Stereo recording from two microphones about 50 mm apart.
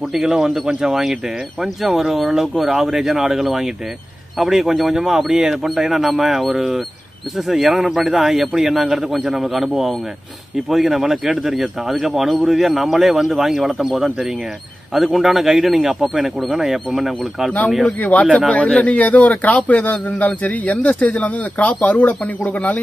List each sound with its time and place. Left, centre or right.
0.1 s speech: centre
17.8 s speech: left